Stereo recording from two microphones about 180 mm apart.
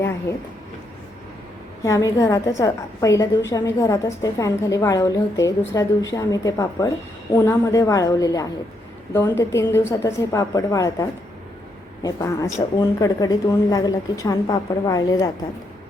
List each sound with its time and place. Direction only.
1.8 s a woman's voice: 15° left (ahead or behind)